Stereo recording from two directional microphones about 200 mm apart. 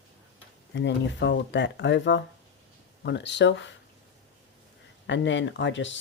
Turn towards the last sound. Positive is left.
turn(degrees=65)  # may be behind; listen again after turning